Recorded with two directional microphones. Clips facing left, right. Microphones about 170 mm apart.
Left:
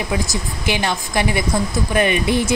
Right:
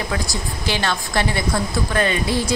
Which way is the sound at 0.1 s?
15° left (ahead or behind).